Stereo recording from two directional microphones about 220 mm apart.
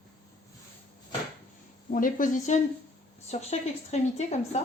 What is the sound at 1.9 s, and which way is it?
A woman's voice, 40° left (ahead or behind).